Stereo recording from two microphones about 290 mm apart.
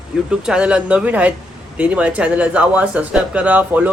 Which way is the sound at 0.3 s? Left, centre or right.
Centre.